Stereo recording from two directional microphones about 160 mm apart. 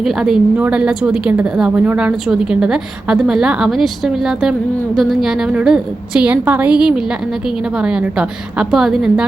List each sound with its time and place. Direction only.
0.0 s a woman's voice: centre (ahead or behind)